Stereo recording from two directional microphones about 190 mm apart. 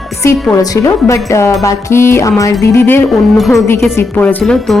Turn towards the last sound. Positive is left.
turn(degrees=5)  # may be behind; listen again after turning